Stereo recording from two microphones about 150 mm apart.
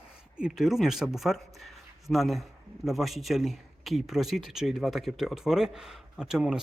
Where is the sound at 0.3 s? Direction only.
5° right (ahead or behind).